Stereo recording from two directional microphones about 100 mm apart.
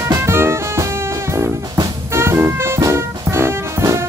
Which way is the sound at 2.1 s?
25° right (ahead or behind).